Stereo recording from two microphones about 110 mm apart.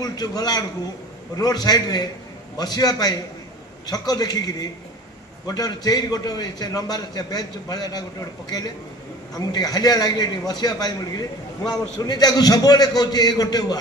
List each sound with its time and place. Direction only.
0.0 s a man's voice: 35° left (ahead or behind)
9.3 s a man's voice: 35° left (ahead or behind)